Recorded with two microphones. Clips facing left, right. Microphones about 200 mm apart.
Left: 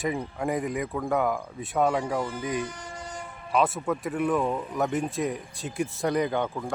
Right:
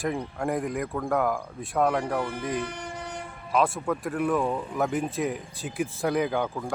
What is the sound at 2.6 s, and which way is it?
Train horn, 60° right (ahead or behind).